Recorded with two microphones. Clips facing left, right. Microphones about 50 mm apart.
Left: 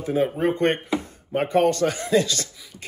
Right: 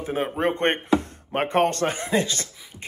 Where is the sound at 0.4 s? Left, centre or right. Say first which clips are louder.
Left 1 dB; right.